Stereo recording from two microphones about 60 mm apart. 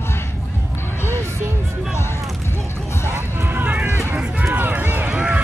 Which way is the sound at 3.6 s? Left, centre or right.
Right.